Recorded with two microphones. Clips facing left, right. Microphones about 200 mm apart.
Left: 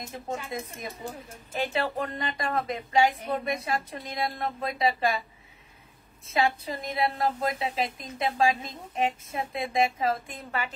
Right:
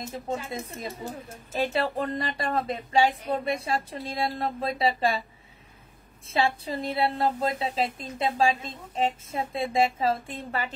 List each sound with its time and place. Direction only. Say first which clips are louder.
0.3 s a woman's voice: right 1 dB; 30° right (ahead or behind)
6.2 s a woman's voice: even; 30° right (ahead or behind)